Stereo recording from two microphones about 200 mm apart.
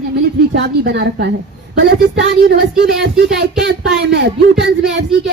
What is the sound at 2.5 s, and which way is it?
Speech, 55° right (ahead or behind).